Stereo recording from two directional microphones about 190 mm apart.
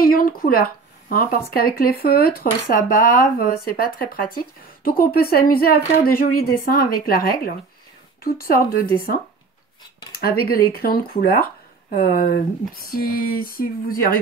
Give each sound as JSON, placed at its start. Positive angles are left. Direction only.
{"t": 0.0, "sound": "speech", "side_deg": 50}
{"t": 10.1, "sound": "speech", "side_deg": 50}